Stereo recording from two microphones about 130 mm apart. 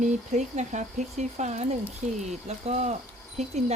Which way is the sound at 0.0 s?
65° right (ahead or behind).